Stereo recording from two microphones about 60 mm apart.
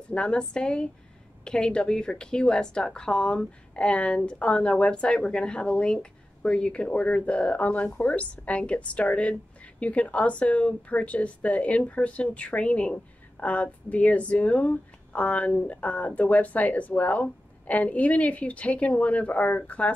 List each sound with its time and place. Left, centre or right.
0.1 s a woman's voice: centre